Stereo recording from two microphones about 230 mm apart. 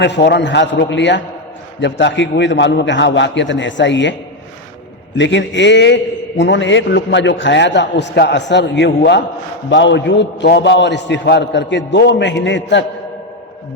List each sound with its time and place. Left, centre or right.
0.0 s a man's voice: left
5.1 s a man's voice: left